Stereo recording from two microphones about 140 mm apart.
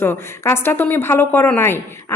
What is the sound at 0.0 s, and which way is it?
A woman's voice, 15° left (ahead or behind).